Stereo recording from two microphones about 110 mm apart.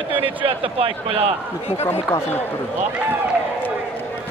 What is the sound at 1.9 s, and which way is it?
Speech, 20° left (ahead or behind).